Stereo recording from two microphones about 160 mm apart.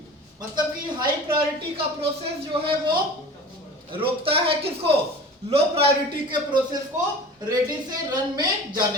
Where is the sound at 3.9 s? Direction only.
35° right (ahead or behind).